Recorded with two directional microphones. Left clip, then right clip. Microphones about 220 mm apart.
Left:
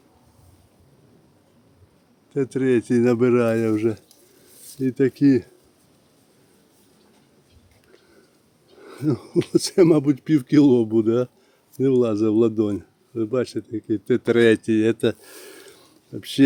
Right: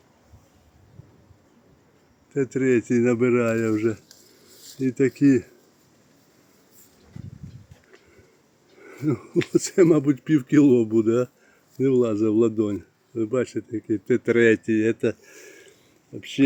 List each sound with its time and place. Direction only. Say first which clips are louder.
2.5 s speech: left 1 dB; 20° left (ahead or behind)
8.8 s speech: left 2 dB; 15° left (ahead or behind); by 15.7 s 35° left (ahead or behind)